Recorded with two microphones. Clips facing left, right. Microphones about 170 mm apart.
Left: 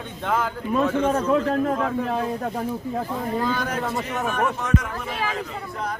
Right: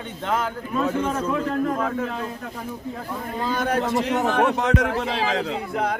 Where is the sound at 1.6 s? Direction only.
40° left (ahead or behind).